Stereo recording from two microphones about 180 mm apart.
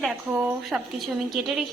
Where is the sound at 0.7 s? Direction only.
Centre (ahead or behind).